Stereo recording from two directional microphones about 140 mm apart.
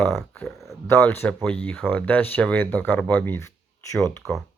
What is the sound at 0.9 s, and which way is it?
Speech, 15° left (ahead or behind).